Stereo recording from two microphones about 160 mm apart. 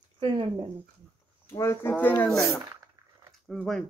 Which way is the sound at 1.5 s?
15° left (ahead or behind).